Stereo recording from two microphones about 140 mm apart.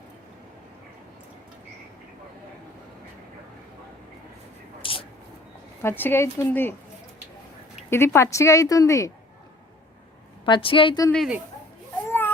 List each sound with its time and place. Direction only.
4.8 s vehicle: 40° left (ahead or behind)
5.8 s speech: 15° left (ahead or behind)
7.9 s speech: 15° left (ahead or behind)
10.4 s a woman's voice: 35° left (ahead or behind)
12.0 s baby cry: 15° left (ahead or behind)